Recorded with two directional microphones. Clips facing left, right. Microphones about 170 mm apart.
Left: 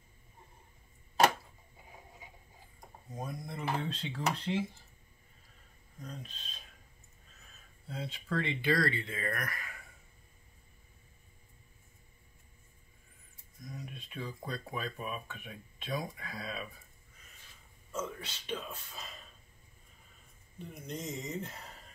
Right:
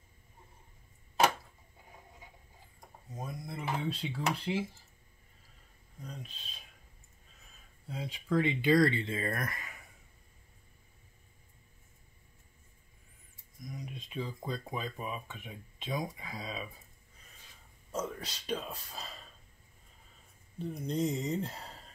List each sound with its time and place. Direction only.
3.2 s speech: 5° right (ahead or behind)
6.0 s speech: 10° right (ahead or behind)
7.9 s speech: 15° right (ahead or behind)
13.7 s speech: 15° right (ahead or behind)
17.9 s speech: 40° right (ahead or behind)
20.7 s speech: 35° right (ahead or behind)